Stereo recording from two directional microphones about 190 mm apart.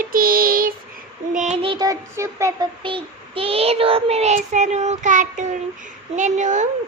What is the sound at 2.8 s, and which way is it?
A child's voice, 30° right (ahead or behind).